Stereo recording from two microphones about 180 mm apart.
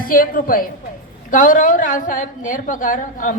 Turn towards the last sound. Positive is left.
turn(degrees=45)  # may be behind; listen again after turning